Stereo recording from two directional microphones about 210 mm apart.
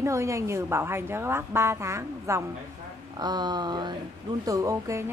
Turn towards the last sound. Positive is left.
turn(degrees=-15)  # may be behind; listen again after turning